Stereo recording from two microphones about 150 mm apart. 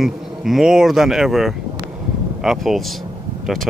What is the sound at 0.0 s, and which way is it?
Speech, centre (ahead or behind).